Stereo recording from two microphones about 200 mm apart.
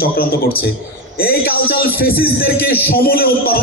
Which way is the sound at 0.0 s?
50° left (ahead or behind).